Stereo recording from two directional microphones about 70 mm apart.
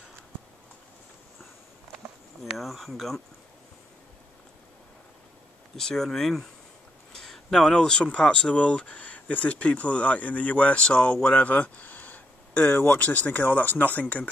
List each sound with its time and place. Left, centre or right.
2.5 s speech: centre
5.8 s speech: centre; by 14.3 s left